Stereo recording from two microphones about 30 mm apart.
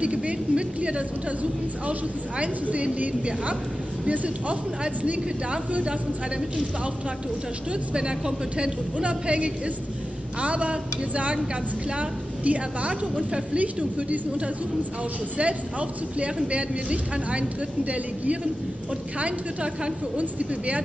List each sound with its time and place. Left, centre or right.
0.0 s a woman's voice: right
4.1 s speech: right
7.9 s speech: right
8.9 s a woman's voice: right
15.3 s a woman's voice: right
20.2 s speech: right